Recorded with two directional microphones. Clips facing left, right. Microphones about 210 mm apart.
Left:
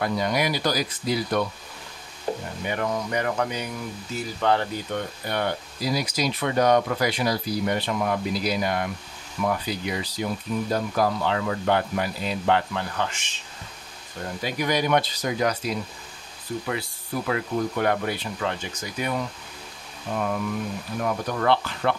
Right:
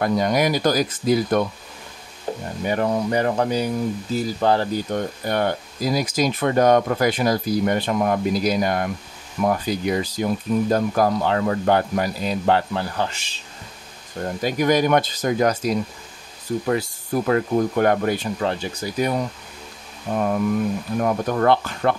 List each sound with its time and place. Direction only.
0.0 s speech: 45° right (ahead or behind)
2.6 s speech: 35° right (ahead or behind)
14.4 s speech: 45° right (ahead or behind)